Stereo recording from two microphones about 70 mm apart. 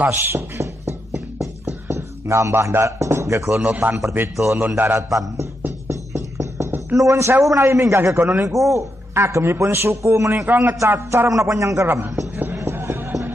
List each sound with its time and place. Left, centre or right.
0.0 s a sound: right
1.7 s speech: right
3.6 s a man's voice: right
4.9 s a man's voice: right
5.9 s music: right
7.0 s a man's voice: right
10.4 s a man's voice: right
11.2 s a man's voice: right
12.5 s a sound: right